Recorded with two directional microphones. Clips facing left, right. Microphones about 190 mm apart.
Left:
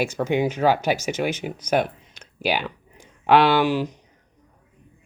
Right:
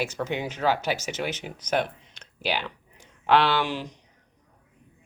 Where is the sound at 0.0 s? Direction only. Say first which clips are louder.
Left 7 dB; 10° left (ahead or behind).